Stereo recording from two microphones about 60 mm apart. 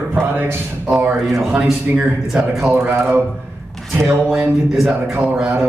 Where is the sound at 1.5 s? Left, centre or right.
Centre.